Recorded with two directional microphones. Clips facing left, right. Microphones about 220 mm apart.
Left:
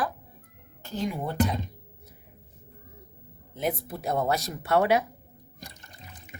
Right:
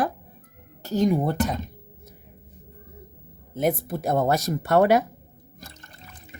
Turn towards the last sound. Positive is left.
turn(degrees=15)  # may be behind; listen again after turning